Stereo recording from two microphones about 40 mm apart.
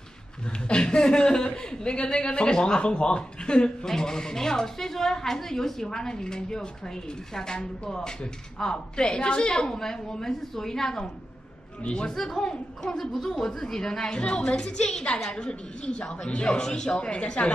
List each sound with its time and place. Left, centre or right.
0.7 s a man's voice: left
3.8 s a woman's voice: centre
12.2 s a woman's voice: centre